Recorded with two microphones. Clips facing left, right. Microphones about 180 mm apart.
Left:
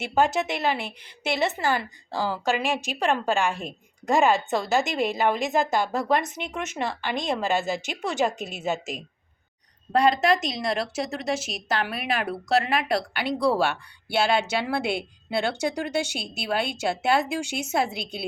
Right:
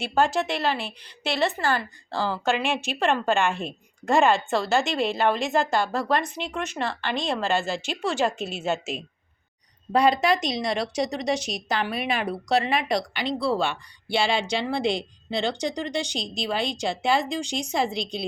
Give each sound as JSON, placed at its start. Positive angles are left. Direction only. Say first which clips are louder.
{"t": 0.1, "sound": "a woman's voice", "louder": "even", "side_deg": 20}
{"t": 3.1, "sound": "speech", "louder": "right 1 dB", "side_deg": 0}
{"t": 4.5, "sound": "speech", "louder": "right 1 dB", "side_deg": 15}
{"t": 9.9, "sound": "speech", "louder": "even", "side_deg": 0}